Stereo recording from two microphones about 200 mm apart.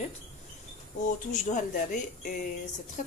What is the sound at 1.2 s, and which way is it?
A woman's voice, 40° left (ahead or behind).